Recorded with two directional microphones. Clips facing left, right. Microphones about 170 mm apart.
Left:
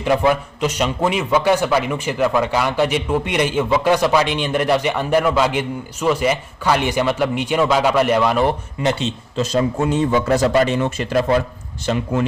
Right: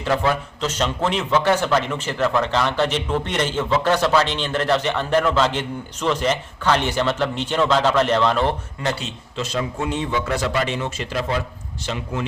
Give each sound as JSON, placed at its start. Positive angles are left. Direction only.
{"t": 0.0, "sound": "a man's voice", "side_deg": 15}
{"t": 9.3, "sound": "a man's voice", "side_deg": 40}